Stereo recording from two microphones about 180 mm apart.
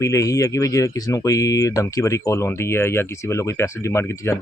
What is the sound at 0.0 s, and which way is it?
Speech, 15° left (ahead or behind).